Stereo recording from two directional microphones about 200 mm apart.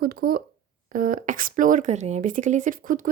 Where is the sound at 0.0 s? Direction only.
50° right (ahead or behind).